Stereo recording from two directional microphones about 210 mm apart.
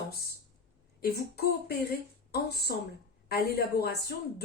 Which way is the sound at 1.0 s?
50° left (ahead or behind).